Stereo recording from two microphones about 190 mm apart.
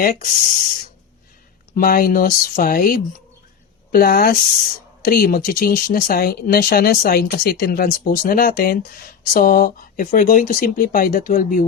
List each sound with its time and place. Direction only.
0.0 s speech: 45° left (ahead or behind)
1.7 s speech: 50° left (ahead or behind)